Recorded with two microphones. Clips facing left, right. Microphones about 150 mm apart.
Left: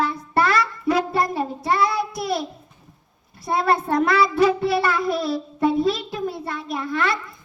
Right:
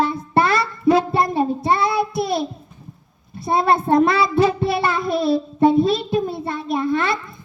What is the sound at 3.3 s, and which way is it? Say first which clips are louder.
A child's voice: right 3 dB; 25° right (ahead or behind).